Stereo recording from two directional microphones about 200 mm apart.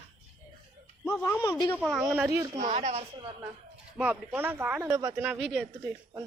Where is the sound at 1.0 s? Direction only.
10° left (ahead or behind).